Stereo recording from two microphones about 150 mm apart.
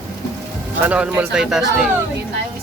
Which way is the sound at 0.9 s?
10° right (ahead or behind).